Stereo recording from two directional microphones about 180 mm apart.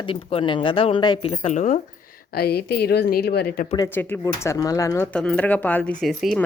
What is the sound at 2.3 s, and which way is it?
Speech, 60° left (ahead or behind).